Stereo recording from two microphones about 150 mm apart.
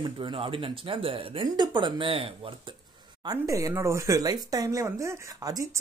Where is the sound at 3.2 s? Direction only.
25° right (ahead or behind).